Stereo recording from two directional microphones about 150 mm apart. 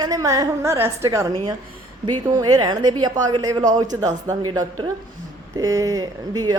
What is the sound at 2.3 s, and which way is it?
Speech, 30° right (ahead or behind).